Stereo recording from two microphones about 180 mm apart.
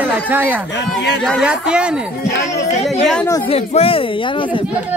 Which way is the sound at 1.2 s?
Centre (ahead or behind).